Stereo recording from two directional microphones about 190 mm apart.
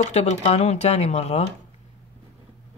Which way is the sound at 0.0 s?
35° left (ahead or behind).